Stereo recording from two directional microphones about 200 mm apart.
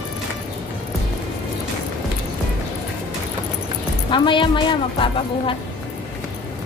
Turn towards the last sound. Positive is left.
turn(degrees=25)  # may be behind; listen again after turning